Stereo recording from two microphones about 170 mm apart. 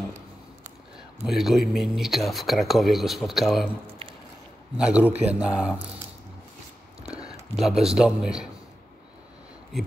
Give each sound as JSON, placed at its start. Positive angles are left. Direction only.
{"t": 1.2, "sound": "speech", "side_deg": 0}
{"t": 4.7, "sound": "a man's voice", "side_deg": -5}
{"t": 7.0, "sound": "a sound", "side_deg": -35}
{"t": 7.5, "sound": "speech", "side_deg": 0}